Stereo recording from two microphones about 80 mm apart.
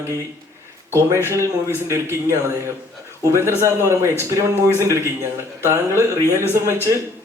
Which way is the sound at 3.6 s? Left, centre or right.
Right.